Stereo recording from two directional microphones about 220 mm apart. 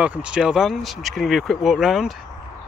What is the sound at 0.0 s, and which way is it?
Speech, 5° right (ahead or behind).